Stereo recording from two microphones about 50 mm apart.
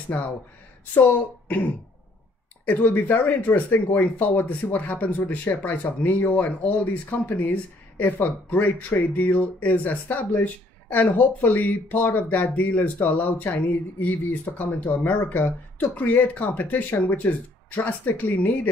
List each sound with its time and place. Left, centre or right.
0.9 s speech: left